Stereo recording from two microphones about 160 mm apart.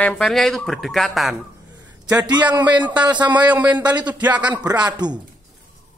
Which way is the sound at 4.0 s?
10° right (ahead or behind).